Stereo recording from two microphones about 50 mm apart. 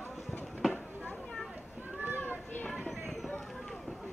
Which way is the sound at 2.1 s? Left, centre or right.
Left.